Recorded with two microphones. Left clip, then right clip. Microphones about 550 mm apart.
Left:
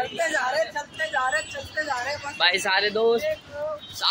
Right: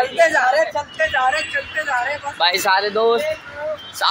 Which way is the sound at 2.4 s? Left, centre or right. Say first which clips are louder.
Right 5 dB; left.